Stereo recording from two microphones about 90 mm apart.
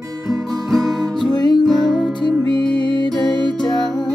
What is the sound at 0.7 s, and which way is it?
Music, centre (ahead or behind).